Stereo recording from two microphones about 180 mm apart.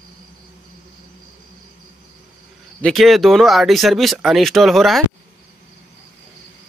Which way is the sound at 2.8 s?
Centre (ahead or behind).